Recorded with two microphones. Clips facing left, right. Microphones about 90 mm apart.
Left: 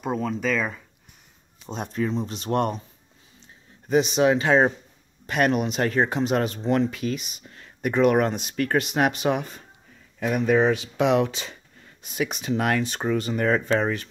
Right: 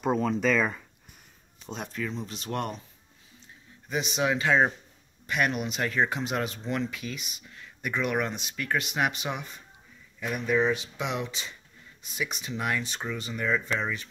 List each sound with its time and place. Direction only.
0.0 s speech: centre (ahead or behind)
1.7 s speech: 35° left (ahead or behind)
3.9 s speech: 35° left (ahead or behind); by 11.5 s 70° left (ahead or behind)
12.0 s speech: 55° left (ahead or behind)